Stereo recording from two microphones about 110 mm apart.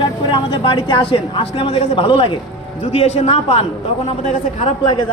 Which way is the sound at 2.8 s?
75° left (ahead or behind).